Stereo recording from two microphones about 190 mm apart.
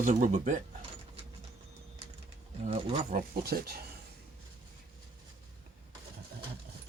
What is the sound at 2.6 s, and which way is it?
Speech, 35° right (ahead or behind).